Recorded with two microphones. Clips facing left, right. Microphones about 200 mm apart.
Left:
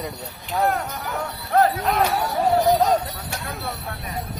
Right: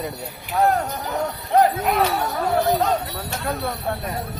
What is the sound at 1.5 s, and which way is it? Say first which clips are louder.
Jingle bell: right 1 dB; 15° right (ahead or behind).